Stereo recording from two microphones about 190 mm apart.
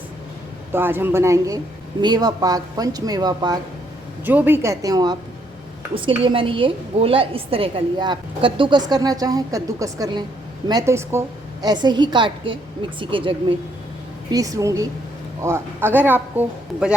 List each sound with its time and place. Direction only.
0.7 s a woman's voice: 10° right (ahead or behind)
4.3 s a man's voice: 10° right (ahead or behind)